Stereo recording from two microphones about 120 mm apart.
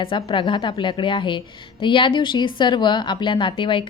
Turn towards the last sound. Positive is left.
turn(degrees=45)  # may be behind; listen again after turning